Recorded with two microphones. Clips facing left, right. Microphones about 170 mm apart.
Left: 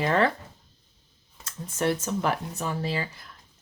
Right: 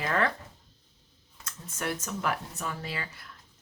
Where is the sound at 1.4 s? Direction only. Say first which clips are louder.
Left 8 dB; 30° left (ahead or behind).